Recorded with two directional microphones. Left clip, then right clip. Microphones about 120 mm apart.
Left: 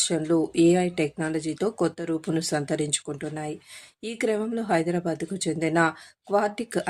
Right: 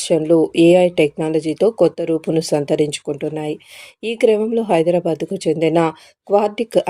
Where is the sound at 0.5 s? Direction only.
25° right (ahead or behind).